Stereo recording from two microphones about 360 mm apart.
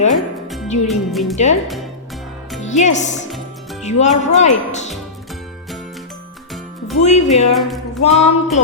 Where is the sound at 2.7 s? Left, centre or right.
Centre.